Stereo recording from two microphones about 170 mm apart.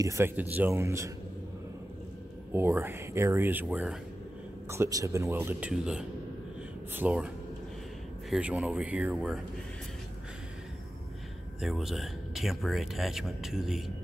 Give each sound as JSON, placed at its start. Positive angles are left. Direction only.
{"t": 0.0, "sound": "speech", "side_deg": -15}
{"t": 2.5, "sound": "speech", "side_deg": -15}
{"t": 11.6, "sound": "speech", "side_deg": 0}